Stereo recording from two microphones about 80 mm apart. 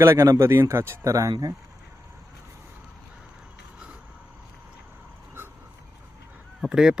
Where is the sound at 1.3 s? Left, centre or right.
Right.